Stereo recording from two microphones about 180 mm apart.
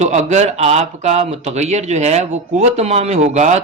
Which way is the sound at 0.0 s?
40° right (ahead or behind).